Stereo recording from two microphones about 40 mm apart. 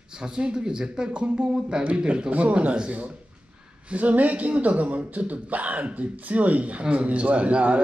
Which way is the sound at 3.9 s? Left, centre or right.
Right.